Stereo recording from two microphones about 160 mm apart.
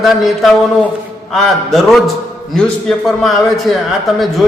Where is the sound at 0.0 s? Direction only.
Centre (ahead or behind).